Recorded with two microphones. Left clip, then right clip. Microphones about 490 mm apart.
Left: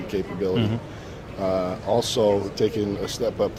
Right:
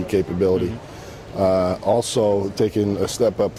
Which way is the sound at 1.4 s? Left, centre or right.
Right.